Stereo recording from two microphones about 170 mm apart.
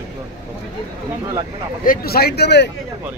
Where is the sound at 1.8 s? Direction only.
60° left (ahead or behind); by 2.7 s 85° left.